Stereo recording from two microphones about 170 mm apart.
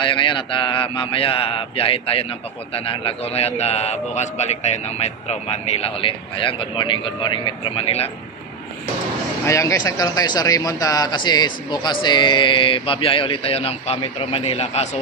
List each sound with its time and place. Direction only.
0.0 s a man's voice: 30° left (ahead or behind)
9.5 s speech: 20° left (ahead or behind); by 14.9 s 40° left (ahead or behind)